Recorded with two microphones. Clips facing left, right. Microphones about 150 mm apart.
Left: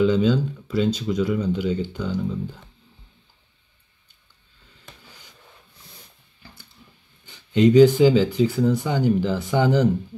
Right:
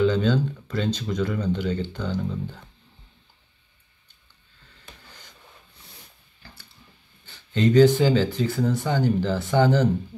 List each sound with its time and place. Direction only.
0.0 s speech: 10° left (ahead or behind)
6.4 s a sound: 20° left (ahead or behind)
7.2 s speech: 15° left (ahead or behind)